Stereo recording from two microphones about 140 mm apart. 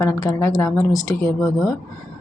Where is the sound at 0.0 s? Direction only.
25° left (ahead or behind).